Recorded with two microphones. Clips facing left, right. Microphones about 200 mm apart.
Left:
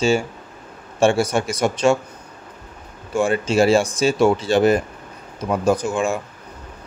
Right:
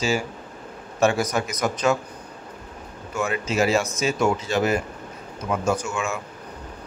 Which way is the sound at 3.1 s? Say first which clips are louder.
Left 6 dB; 30° left (ahead or behind).